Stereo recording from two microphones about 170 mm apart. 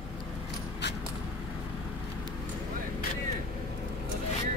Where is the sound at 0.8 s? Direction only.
90° left.